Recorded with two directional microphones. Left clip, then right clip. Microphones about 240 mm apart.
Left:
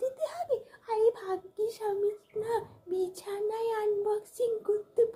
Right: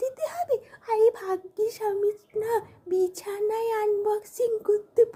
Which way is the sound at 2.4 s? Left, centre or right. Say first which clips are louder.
Right 5 dB; right.